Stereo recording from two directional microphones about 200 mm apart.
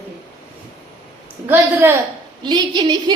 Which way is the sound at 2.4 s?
20° right (ahead or behind).